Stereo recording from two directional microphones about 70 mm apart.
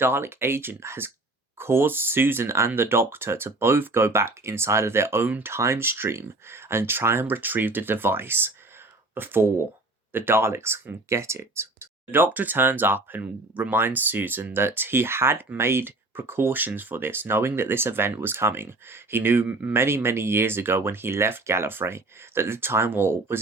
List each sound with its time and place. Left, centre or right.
0.0 s speech: right